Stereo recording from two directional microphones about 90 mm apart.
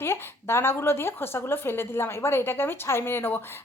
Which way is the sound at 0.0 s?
25° left (ahead or behind).